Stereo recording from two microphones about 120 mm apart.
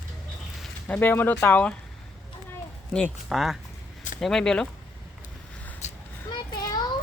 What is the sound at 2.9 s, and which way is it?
Speech, 5° left (ahead or behind).